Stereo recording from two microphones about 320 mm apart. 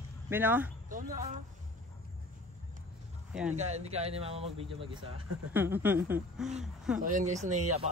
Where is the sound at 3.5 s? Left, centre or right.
Right.